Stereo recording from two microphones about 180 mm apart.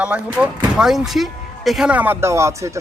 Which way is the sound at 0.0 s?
5° right (ahead or behind).